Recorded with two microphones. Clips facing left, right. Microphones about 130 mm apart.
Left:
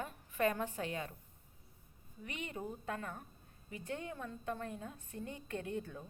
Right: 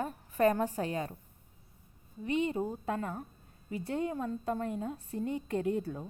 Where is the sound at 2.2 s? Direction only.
30° right (ahead or behind).